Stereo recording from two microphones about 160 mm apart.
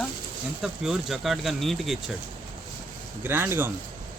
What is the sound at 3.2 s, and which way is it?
Speech, 15° right (ahead or behind).